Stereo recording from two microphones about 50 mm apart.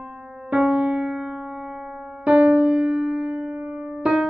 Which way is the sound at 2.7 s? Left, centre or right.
Centre.